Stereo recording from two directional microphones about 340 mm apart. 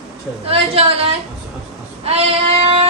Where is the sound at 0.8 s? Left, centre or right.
Centre.